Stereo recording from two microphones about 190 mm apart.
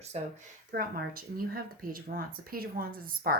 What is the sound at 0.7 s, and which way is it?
Speech, 55° right (ahead or behind).